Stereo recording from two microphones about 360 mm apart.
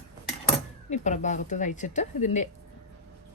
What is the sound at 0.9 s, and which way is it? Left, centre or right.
A woman's voice, centre.